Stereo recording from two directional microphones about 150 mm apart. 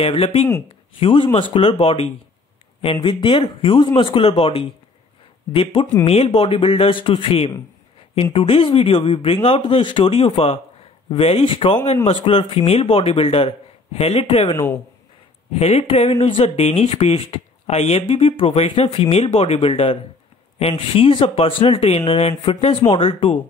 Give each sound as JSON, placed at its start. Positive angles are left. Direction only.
{"t": 0.0, "sound": "speech", "side_deg": 40}